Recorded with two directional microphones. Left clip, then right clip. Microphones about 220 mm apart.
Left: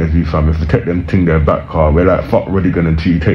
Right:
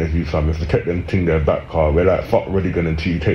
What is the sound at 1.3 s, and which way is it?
Speech, 20° left (ahead or behind).